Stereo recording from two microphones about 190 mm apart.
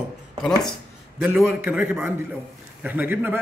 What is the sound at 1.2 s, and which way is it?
A man's voice, 5° right (ahead or behind).